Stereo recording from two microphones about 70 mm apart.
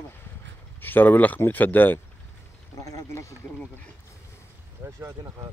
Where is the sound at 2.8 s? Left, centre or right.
Left.